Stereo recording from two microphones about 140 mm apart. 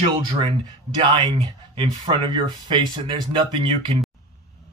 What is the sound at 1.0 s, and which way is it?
Speech, 35° right (ahead or behind).